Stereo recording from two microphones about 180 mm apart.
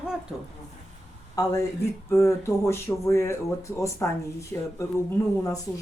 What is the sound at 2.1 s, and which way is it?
Speech, 15° left (ahead or behind).